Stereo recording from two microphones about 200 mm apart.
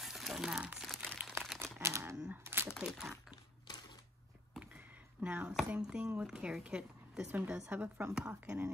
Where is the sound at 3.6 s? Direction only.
20° left (ahead or behind).